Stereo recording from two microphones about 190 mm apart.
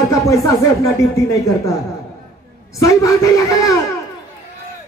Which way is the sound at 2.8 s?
15° left (ahead or behind).